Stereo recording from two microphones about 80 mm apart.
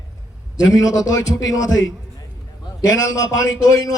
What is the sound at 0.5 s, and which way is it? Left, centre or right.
A man's voice, left.